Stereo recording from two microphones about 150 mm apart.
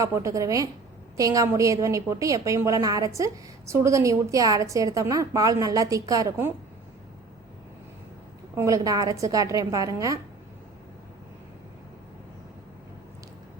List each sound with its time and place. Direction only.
0.0 s a woman's voice: 20° right (ahead or behind)
8.5 s a woman's voice: 20° right (ahead or behind)